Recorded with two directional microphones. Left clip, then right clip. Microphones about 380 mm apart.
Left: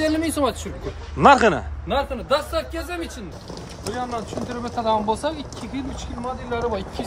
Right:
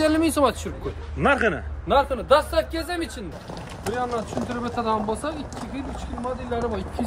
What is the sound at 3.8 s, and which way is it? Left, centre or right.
Speech, right.